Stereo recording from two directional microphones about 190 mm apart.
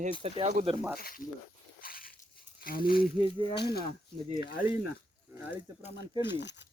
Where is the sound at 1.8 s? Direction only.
50° left (ahead or behind).